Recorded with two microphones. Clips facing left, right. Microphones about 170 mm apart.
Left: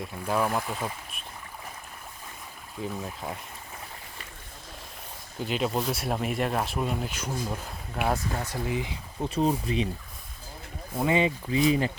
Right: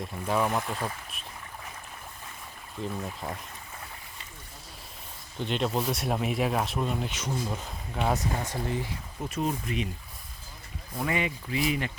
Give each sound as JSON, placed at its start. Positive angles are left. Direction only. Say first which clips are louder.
{"t": 0.0, "sound": "speech", "louder": "even", "side_deg": 0}
{"t": 2.7, "sound": "speech", "louder": "even", "side_deg": 5}
{"t": 5.4, "sound": "speech", "louder": "even", "side_deg": 5}
{"t": 9.2, "sound": "speech", "louder": "left 5 dB", "side_deg": 30}
{"t": 10.9, "sound": "speech", "louder": "left 5 dB", "side_deg": 25}